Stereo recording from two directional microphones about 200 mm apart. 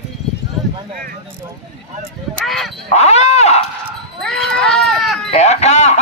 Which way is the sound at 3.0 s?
35° left (ahead or behind).